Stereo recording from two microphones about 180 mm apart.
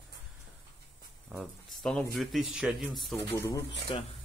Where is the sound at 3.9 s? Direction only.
30° left (ahead or behind).